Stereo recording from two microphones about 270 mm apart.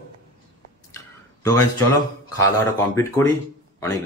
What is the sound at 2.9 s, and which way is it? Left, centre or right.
A man's voice, centre.